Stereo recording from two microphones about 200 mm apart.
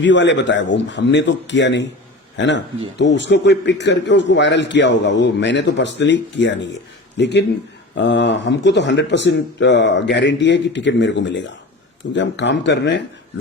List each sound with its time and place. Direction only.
0.0 s a man's voice: 65° left (ahead or behind)